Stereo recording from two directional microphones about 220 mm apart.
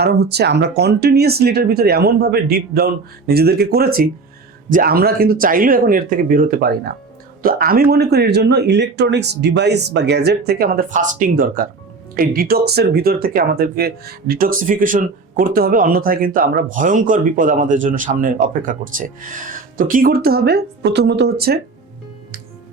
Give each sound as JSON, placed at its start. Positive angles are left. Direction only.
{"t": 0.0, "sound": "speech", "side_deg": -45}